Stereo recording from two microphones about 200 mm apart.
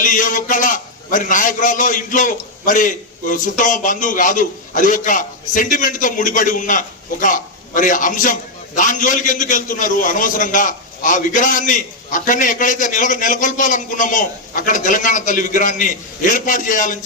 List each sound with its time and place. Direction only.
0.0 s a man's voice: 40° left (ahead or behind)